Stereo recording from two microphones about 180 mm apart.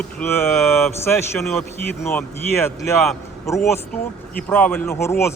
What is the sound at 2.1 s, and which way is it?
Speech, 15° left (ahead or behind).